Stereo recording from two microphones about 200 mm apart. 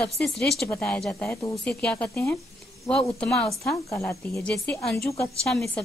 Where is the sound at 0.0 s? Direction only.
5° left (ahead or behind).